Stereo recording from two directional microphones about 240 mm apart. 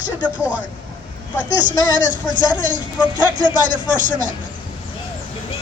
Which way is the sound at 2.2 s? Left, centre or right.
Centre.